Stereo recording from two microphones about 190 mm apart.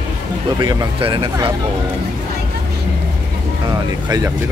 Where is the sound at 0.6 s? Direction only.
20° right (ahead or behind).